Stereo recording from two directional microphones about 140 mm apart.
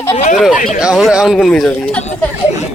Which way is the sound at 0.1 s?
50° left (ahead or behind).